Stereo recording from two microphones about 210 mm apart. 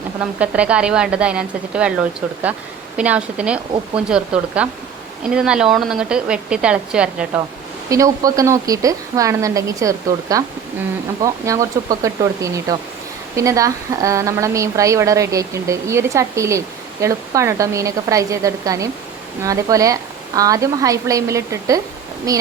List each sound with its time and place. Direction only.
0.3 s a woman's voice: 5° right (ahead or behind)
3.0 s a woman's voice: 5° right (ahead or behind)
7.9 s a woman's voice: 15° right (ahead or behind)